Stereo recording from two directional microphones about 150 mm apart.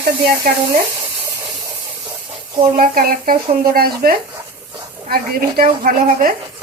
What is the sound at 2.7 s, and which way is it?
Speech, 75° right (ahead or behind).